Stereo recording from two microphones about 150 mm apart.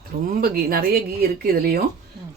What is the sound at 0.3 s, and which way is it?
A woman's voice, 75° right (ahead or behind).